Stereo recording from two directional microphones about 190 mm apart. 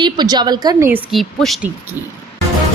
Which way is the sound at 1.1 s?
Centre (ahead or behind).